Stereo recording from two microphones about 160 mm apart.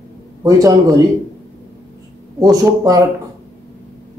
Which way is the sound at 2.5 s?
20° right (ahead or behind).